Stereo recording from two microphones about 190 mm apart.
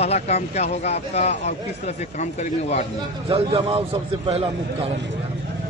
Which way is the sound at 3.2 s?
30° right (ahead or behind).